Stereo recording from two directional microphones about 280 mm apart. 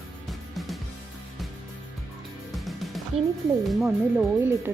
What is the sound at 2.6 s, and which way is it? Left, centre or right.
Music, centre.